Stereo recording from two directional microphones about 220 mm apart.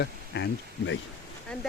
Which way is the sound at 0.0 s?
50° left (ahead or behind).